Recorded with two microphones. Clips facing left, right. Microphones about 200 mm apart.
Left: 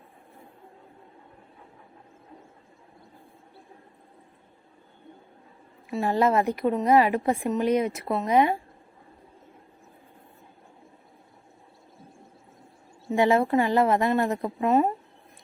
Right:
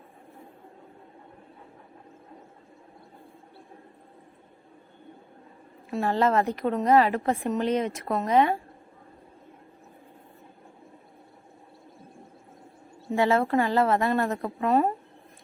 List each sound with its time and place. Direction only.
6.0 s speech: 15° left (ahead or behind)
13.1 s speech: 15° left (ahead or behind)